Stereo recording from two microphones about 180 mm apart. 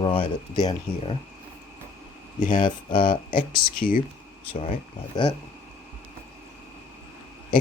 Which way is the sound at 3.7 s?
50° left (ahead or behind).